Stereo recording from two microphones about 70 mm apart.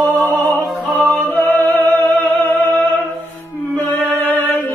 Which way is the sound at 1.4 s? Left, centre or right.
Left.